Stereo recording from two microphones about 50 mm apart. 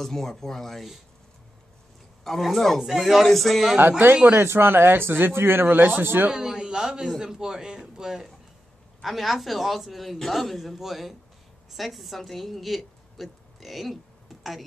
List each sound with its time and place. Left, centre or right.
0.0 s speech: centre
2.2 s a man's voice: centre
4.3 s speech: right
5.8 s a man's voice: right
6.3 s a man's voice: centre